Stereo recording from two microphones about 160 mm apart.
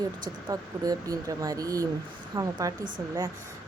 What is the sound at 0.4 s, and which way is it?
Speech, 25° right (ahead or behind).